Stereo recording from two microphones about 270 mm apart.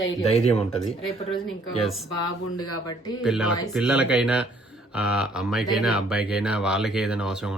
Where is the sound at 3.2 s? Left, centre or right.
Centre.